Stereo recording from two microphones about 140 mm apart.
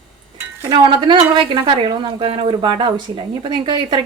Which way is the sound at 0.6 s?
35° right (ahead or behind).